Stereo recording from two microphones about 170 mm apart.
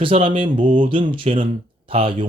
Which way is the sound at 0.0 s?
30° right (ahead or behind).